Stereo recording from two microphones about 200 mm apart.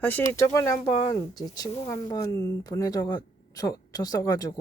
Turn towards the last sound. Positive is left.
turn(degrees=20)  # may be behind; listen again after turning